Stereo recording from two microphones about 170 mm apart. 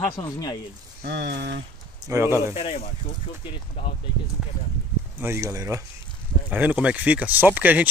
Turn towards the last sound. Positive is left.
turn(degrees=-10)  # may be behind; listen again after turning